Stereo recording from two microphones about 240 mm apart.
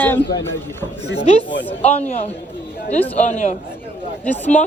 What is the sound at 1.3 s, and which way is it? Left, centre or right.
A man's voice, left.